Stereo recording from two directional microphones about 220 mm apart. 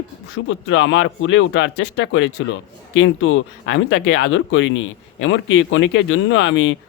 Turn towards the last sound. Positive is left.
turn(degrees=60)  # may be behind; listen again after turning